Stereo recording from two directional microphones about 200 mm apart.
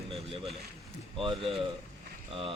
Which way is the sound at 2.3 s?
25° right (ahead or behind).